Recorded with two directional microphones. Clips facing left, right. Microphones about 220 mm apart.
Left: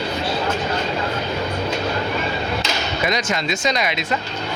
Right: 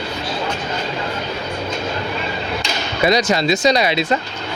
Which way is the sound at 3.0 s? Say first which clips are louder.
Right 8 dB; 35° right (ahead or behind).